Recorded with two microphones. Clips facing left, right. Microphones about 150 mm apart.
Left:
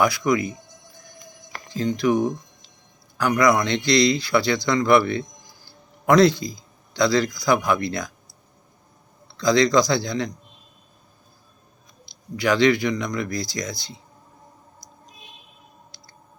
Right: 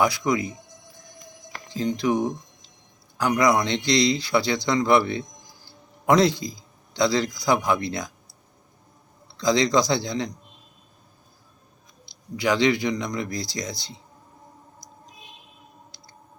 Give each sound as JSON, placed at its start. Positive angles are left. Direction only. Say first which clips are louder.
{"t": 0.0, "sound": "speech", "louder": "left 2 dB", "side_deg": -25}
{"t": 1.7, "sound": "a man's voice", "louder": "left 2 dB", "side_deg": -20}
{"t": 9.4, "sound": "speech", "louder": "left 3 dB", "side_deg": -20}
{"t": 12.4, "sound": "speech", "louder": "left 3 dB", "side_deg": -20}